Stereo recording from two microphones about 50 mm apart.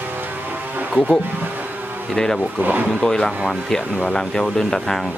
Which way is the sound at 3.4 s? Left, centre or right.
Centre.